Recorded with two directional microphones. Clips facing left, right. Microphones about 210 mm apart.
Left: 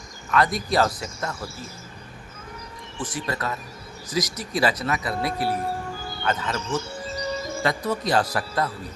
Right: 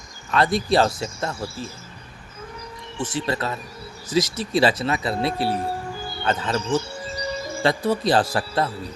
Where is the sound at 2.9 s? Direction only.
25° right (ahead or behind).